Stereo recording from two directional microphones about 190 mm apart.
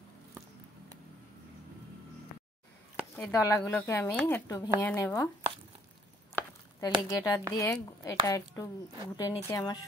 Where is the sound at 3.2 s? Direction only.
15° left (ahead or behind).